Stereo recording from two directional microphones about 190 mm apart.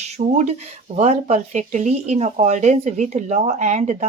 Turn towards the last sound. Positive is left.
turn(degrees=-40)  # may be behind; listen again after turning